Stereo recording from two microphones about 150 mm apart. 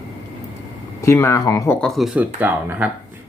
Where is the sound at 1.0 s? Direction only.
20° left (ahead or behind).